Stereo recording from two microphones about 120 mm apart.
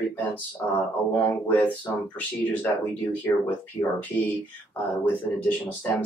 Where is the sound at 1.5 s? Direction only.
15° left (ahead or behind).